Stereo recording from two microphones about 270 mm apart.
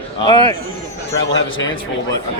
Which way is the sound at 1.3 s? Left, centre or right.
Left.